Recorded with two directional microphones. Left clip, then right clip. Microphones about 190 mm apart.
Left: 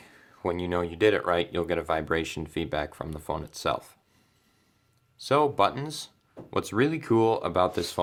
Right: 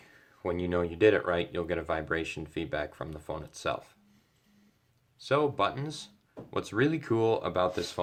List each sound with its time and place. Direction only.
0.0 s speech: 40° left (ahead or behind)
5.1 s speech: 40° left (ahead or behind)